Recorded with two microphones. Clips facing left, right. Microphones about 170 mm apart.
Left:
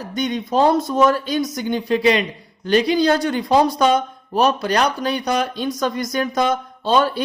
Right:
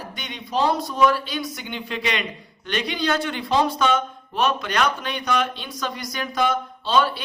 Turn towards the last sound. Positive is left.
turn(degrees=45)  # may be behind; listen again after turning